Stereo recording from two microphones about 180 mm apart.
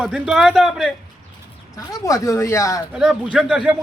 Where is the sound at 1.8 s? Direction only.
20° left (ahead or behind).